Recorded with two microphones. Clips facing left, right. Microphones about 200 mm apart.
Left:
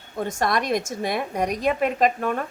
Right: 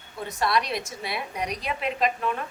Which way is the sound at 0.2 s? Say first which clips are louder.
Left 2 dB; 45° left (ahead or behind).